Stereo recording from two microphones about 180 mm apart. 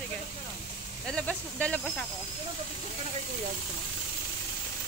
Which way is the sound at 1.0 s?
5° left (ahead or behind).